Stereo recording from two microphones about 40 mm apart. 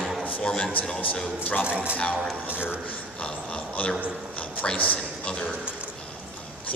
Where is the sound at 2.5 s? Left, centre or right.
Left.